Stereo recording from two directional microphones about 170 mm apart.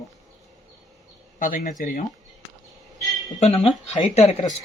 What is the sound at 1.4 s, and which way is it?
Speech, 50° left (ahead or behind).